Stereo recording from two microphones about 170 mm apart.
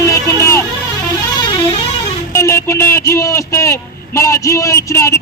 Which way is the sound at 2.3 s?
15° left (ahead or behind).